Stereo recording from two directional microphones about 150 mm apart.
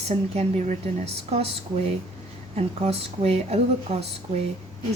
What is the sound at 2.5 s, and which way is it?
A woman's voice, 45° right (ahead or behind).